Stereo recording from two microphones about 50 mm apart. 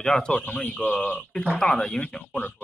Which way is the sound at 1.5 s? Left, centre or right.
Centre.